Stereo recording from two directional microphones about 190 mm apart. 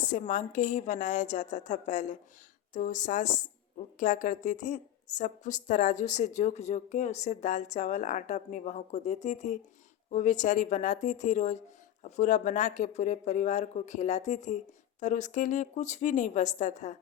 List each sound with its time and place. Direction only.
0.1 s speech: 40° left (ahead or behind)